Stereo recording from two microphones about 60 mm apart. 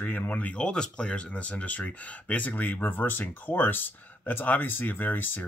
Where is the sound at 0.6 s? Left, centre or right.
Centre.